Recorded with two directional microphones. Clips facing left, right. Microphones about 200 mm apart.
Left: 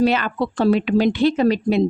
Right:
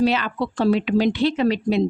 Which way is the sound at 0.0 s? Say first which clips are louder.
Left 2 dB; 50° left (ahead or behind).